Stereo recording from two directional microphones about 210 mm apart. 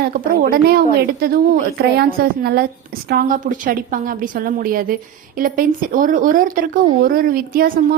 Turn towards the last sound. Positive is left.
turn(degrees=-45)  # may be behind; listen again after turning